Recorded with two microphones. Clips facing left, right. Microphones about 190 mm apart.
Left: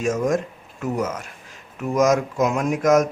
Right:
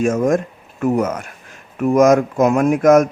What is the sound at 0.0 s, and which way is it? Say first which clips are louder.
Speech: right 5 dB; 55° right (ahead or behind).